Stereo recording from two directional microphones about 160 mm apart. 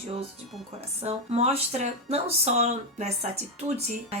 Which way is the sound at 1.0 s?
40° right (ahead or behind).